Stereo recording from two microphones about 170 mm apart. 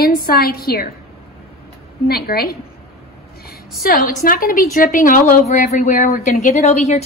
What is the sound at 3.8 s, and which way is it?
A woman's voice, 60° left (ahead or behind).